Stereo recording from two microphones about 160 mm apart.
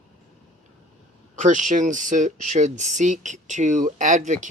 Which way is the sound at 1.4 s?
50° right (ahead or behind).